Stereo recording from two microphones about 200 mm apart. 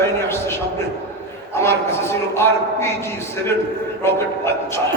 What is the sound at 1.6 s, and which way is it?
Speech, 10° left (ahead or behind).